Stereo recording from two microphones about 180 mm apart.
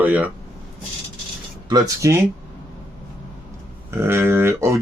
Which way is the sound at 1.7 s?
15° right (ahead or behind).